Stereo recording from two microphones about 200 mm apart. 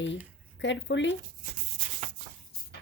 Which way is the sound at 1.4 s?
35° right (ahead or behind).